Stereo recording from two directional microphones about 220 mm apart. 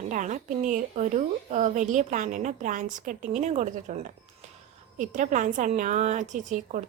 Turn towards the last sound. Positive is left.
turn(degrees=-35)  # may be behind; listen again after turning